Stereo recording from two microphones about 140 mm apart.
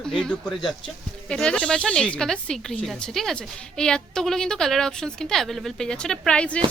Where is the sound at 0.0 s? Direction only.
5° left (ahead or behind).